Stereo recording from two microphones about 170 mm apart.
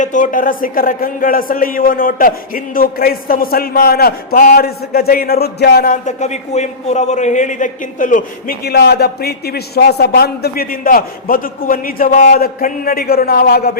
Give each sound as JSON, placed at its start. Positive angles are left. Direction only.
{"t": 0.0, "sound": "speech", "side_deg": 50}